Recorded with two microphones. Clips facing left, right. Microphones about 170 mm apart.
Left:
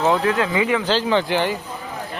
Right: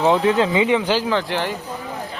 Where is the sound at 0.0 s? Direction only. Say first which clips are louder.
Right 2 dB; 20° right (ahead or behind).